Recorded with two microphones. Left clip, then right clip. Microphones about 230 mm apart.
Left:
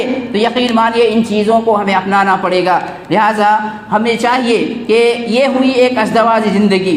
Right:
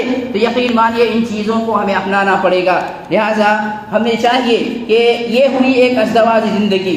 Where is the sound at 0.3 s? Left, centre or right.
Left.